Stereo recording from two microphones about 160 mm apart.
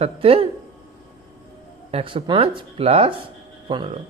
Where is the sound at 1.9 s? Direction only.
35° right (ahead or behind).